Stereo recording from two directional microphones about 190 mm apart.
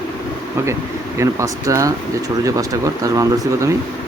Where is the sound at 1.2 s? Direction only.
15° right (ahead or behind).